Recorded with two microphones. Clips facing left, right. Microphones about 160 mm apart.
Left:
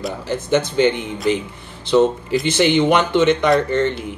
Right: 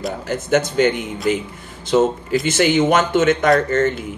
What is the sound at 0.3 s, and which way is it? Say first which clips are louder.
Speech: even; 50° right (ahead or behind).